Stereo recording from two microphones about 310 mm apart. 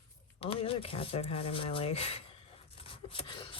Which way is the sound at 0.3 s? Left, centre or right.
Centre.